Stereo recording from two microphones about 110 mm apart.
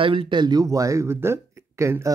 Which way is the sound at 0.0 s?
55° right (ahead or behind).